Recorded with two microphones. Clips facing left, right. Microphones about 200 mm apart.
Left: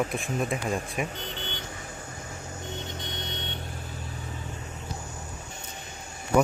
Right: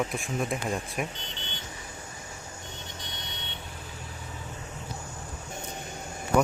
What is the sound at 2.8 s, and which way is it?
Vehicle, 25° left (ahead or behind).